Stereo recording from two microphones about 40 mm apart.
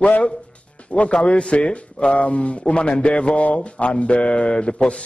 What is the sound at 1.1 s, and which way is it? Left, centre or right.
A man's voice, left.